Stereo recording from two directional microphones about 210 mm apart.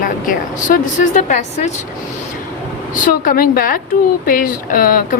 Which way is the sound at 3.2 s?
40° left (ahead or behind).